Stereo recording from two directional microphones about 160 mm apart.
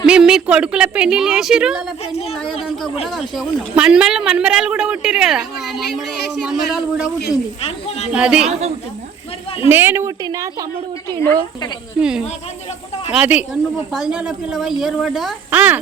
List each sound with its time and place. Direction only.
0.0 s speech: 5° right (ahead or behind)
7.6 s speech: 40° left (ahead or behind)
8.1 s speech: 5° right (ahead or behind)
9.6 s speech: 15° right (ahead or behind)
11.9 s speech: 5° right (ahead or behind)
13.2 s speech: 5° right (ahead or behind)